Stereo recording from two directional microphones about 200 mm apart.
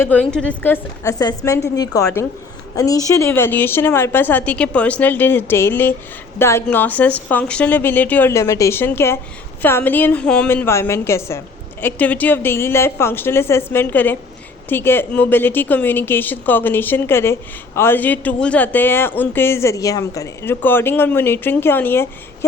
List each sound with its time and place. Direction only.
0.0 s speech: 5° left (ahead or behind)